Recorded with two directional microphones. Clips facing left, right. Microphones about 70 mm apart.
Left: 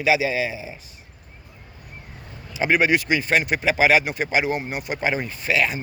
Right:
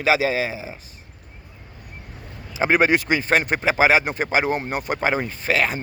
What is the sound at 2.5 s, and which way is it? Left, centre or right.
Speech, right.